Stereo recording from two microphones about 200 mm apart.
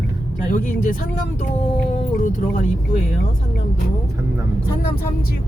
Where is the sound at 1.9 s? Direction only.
40° left (ahead or behind).